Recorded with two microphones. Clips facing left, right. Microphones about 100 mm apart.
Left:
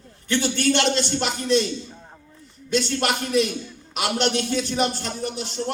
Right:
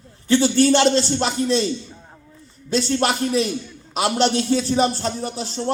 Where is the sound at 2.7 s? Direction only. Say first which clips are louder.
Right 3 dB; 35° right (ahead or behind).